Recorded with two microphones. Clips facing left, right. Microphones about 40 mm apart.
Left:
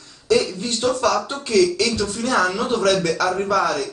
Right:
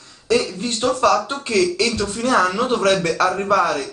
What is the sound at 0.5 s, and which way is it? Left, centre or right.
A man's voice, right.